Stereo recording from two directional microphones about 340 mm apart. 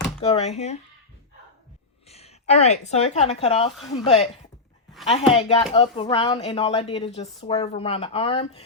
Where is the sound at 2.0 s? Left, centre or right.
Centre.